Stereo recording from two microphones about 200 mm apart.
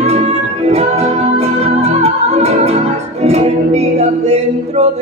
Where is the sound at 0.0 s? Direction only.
35° right (ahead or behind).